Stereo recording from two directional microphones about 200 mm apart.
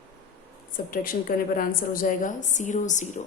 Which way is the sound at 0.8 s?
45° left (ahead or behind).